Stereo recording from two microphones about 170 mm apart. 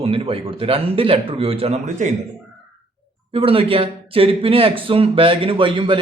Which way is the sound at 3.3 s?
35° right (ahead or behind).